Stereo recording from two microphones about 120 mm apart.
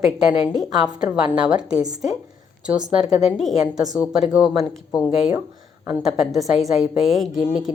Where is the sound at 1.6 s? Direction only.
30° right (ahead or behind).